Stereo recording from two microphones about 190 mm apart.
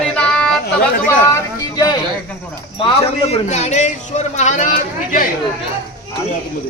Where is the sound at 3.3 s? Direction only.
35° left (ahead or behind).